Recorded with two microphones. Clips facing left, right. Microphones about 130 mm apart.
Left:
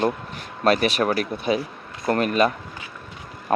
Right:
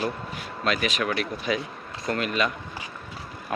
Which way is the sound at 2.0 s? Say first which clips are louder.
Left 6 dB; 45° left (ahead or behind).